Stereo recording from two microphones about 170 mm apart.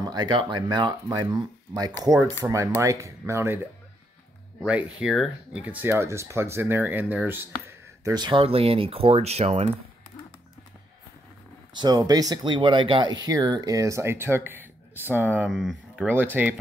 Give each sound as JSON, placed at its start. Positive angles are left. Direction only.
{"t": 0.0, "sound": "speech", "side_deg": -25}
{"t": 11.7, "sound": "speech", "side_deg": -25}
{"t": 15.4, "sound": "speech", "side_deg": 0}
{"t": 16.1, "sound": "speech", "side_deg": -10}